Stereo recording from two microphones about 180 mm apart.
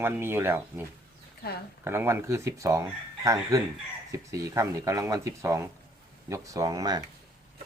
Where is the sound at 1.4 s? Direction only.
60° left (ahead or behind).